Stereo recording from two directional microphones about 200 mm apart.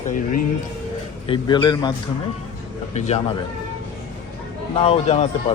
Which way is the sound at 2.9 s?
30° left (ahead or behind).